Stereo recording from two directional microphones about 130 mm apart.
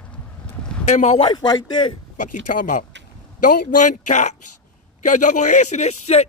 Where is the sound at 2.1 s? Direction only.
80° left.